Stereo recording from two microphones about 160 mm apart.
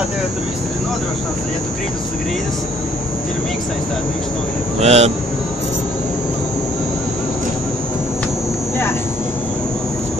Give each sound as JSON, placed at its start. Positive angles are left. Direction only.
{"t": 4.7, "sound": "speech", "side_deg": -40}